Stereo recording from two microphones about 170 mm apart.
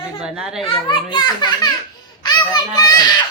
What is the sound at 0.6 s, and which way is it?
A child's voice, 30° left (ahead or behind).